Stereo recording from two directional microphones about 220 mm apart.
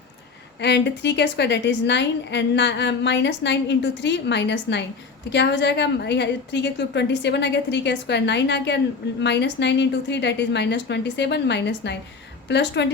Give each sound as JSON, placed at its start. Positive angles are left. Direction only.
{"t": 0.6, "sound": "a woman's voice", "side_deg": 50}